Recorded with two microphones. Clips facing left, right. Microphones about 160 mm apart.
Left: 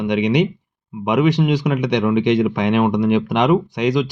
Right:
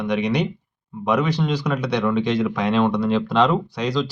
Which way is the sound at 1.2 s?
15° left (ahead or behind).